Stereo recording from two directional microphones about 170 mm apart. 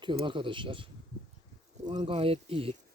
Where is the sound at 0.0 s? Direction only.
30° right (ahead or behind).